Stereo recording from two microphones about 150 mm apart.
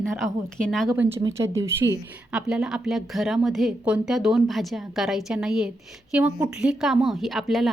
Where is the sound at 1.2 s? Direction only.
20° right (ahead or behind).